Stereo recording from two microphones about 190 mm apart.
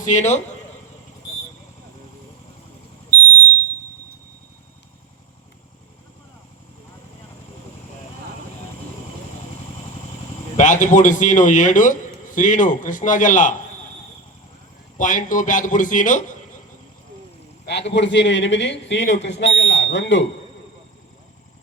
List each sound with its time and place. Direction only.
0.0 s a man's voice: 40° left (ahead or behind)
10.6 s a man's voice: 40° left (ahead or behind)
14.9 s a man's voice: 45° left (ahead or behind)
17.7 s speech: 65° left (ahead or behind)